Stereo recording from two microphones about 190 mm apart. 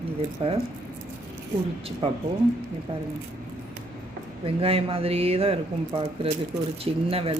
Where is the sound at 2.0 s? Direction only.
30° right (ahead or behind).